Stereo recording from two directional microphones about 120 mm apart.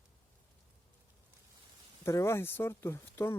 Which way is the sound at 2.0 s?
25° left (ahead or behind).